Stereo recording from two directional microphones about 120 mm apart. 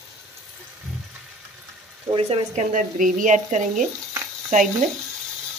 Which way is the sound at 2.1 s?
55° right (ahead or behind).